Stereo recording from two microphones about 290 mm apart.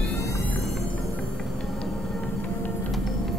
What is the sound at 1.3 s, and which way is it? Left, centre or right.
Music, centre.